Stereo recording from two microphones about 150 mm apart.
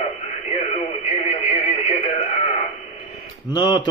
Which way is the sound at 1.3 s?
45° left (ahead or behind).